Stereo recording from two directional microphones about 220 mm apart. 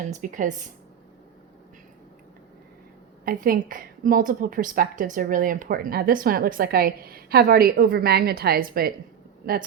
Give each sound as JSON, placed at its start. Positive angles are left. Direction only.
{"t": 0.0, "sound": "a woman's voice", "side_deg": -35}
{"t": 3.2, "sound": "a woman's voice", "side_deg": -40}